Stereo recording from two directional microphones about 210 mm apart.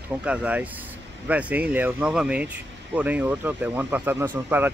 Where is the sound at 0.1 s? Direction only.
5° right (ahead or behind).